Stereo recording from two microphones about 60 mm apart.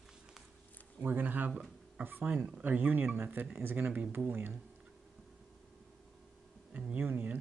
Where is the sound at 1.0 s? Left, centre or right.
Right.